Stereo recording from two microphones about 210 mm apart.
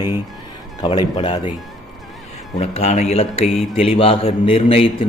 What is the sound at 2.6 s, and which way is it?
A man's voice, 35° left (ahead or behind).